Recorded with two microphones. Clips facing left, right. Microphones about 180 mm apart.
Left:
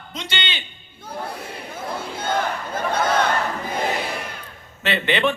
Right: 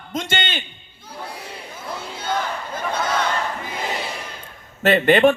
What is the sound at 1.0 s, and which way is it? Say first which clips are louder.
Battle cry: left 4 dB; 55° left (ahead or behind).